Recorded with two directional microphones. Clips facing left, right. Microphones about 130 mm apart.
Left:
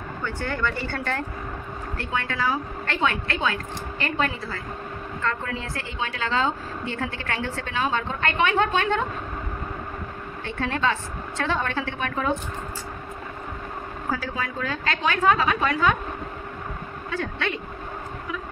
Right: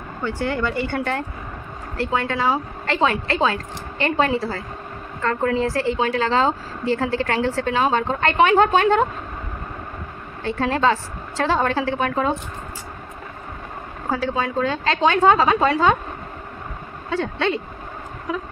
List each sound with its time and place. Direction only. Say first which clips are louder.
0.2 s a woman's voice: right 5 dB; 30° right (ahead or behind)
10.4 s a woman's voice: right 6 dB; 35° right (ahead or behind)
14.1 s a woman's voice: right 8 dB; 25° right (ahead or behind)
17.1 s a woman's voice: right 7 dB; 30° right (ahead or behind)